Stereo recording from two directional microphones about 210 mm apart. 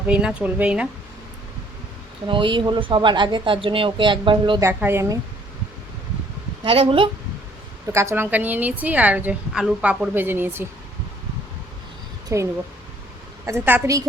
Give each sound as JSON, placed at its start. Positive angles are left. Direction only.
{"t": 0.1, "sound": "a woman's voice", "side_deg": -5}
{"t": 2.2, "sound": "speech", "side_deg": -25}
{"t": 4.6, "sound": "a woman's voice", "side_deg": -10}
{"t": 6.7, "sound": "speech", "side_deg": -25}
{"t": 7.9, "sound": "a woman's voice", "side_deg": -10}
{"t": 12.3, "sound": "a woman's voice", "side_deg": -15}